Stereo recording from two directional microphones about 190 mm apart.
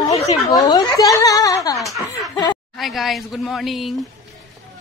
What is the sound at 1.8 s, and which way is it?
Speech, centre (ahead or behind).